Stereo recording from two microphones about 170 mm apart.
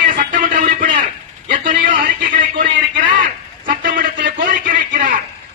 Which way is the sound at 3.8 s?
55° right (ahead or behind).